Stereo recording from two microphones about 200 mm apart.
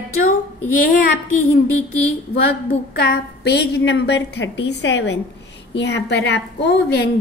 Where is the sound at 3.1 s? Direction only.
55° left (ahead or behind).